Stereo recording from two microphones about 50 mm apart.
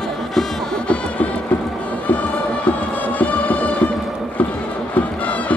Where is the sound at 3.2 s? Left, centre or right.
Left.